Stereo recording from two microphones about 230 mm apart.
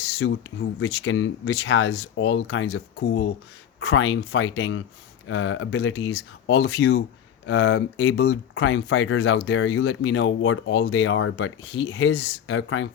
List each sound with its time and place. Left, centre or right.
0.2 s speech: left